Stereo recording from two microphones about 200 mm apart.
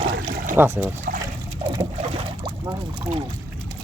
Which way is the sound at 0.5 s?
10° right (ahead or behind).